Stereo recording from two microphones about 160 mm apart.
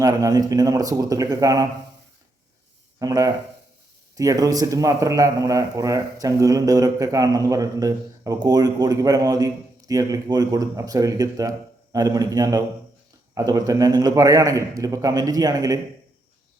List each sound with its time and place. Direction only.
0.0 s speech: 20° right (ahead or behind)
3.0 s speech: 25° right (ahead or behind)